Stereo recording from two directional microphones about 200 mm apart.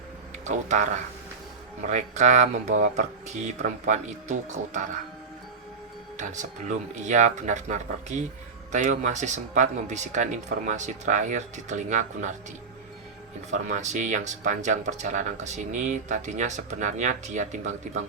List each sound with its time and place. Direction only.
0.4 s speech: 35° right (ahead or behind)
6.1 s speech: 35° right (ahead or behind)
13.5 s speech: 35° right (ahead or behind)